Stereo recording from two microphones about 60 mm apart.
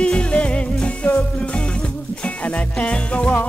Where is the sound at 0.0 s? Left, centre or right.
Centre.